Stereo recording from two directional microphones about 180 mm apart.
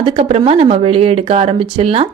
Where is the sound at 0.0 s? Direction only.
30° right (ahead or behind).